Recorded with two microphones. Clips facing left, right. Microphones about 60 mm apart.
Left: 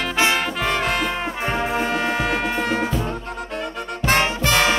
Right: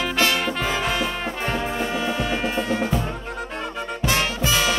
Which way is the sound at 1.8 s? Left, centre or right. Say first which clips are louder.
Left 3 dB; left.